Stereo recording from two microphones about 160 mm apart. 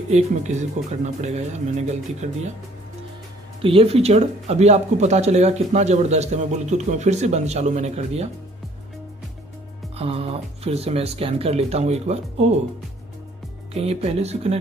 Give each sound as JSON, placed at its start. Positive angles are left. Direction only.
{"t": 0.1, "sound": "speech", "side_deg": -45}
{"t": 3.6, "sound": "speech", "side_deg": -35}
{"t": 9.9, "sound": "speech", "side_deg": -40}
{"t": 13.7, "sound": "speech", "side_deg": -40}